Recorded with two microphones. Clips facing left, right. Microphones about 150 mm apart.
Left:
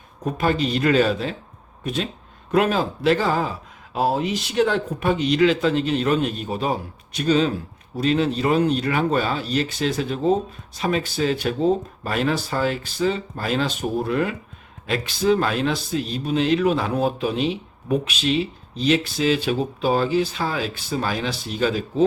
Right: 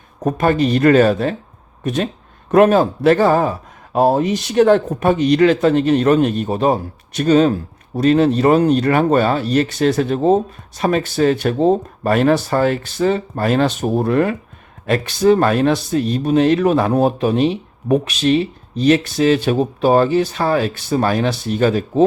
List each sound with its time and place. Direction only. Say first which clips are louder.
0.2 s speech: right 6 dB; 45° right (ahead or behind)
2.5 s speech: right 8 dB; 50° right (ahead or behind)
9.9 s speech: right 5 dB; 60° right (ahead or behind)